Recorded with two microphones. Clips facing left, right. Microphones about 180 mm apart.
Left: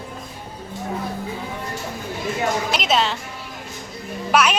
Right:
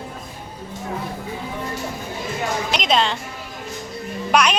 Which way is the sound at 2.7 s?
5° left (ahead or behind).